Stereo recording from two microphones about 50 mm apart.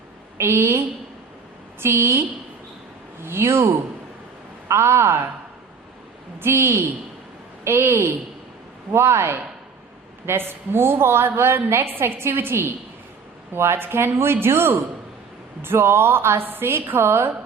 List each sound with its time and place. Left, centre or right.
0.3 s speech: right
3.2 s a woman's voice: right
4.7 s speech: right
6.4 s a woman's voice: right